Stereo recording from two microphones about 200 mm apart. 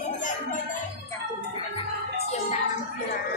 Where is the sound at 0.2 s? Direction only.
40° left (ahead or behind).